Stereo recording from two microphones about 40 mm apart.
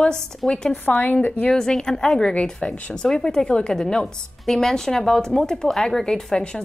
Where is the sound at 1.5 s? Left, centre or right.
Centre.